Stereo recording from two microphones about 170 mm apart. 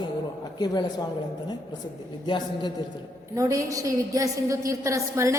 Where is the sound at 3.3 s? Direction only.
20° right (ahead or behind).